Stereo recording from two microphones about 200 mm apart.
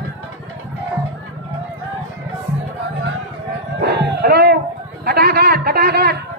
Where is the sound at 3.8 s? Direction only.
55° right (ahead or behind).